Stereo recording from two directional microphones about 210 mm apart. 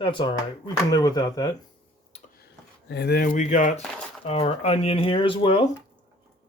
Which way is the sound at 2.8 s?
50° left (ahead or behind).